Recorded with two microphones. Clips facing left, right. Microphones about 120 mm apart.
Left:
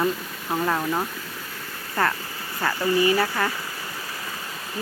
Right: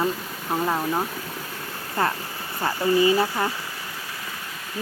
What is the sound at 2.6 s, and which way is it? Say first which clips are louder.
Speech: right 1 dB; 25° right (ahead or behind).